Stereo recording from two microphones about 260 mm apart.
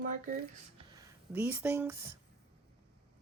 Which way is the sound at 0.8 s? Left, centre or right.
Centre.